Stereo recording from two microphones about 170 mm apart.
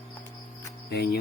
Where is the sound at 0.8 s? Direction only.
75° left (ahead or behind).